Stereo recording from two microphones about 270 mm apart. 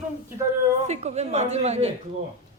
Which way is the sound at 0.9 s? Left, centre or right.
Right.